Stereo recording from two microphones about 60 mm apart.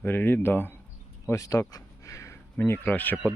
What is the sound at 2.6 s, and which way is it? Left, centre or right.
Speech, left.